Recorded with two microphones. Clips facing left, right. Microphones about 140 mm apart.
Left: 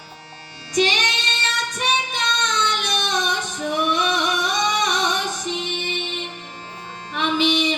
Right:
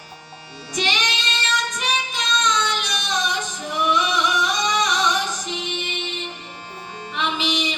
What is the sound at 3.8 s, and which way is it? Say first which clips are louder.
Music: right 1 dB; 60° left (ahead or behind).